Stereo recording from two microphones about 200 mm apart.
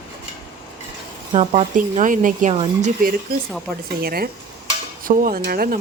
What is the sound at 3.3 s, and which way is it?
Speech, 50° right (ahead or behind).